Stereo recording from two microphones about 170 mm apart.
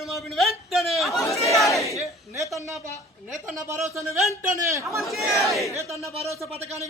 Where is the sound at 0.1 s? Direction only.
Centre (ahead or behind).